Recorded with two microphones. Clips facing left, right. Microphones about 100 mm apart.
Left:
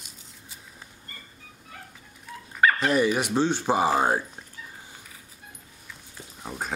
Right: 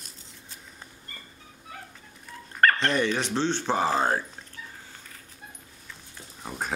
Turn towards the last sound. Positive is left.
turn(degrees=0)  # may be behind; listen again after turning